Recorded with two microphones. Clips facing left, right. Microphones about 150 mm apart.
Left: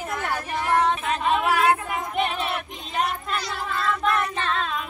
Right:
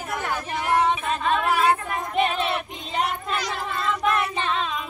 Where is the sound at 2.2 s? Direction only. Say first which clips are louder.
Right 3 dB; centre (ahead or behind).